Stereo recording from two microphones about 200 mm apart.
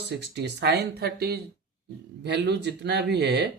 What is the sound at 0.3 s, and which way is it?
Speech, 55° right (ahead or behind).